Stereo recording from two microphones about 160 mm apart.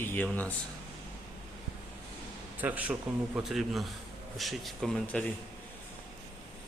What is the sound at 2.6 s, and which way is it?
Speech, 10° right (ahead or behind).